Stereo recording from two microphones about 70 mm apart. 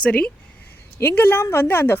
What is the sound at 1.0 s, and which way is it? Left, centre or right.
A woman's voice, left.